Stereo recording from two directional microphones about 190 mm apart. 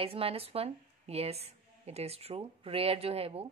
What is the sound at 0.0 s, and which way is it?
A woman's voice, 30° right (ahead or behind).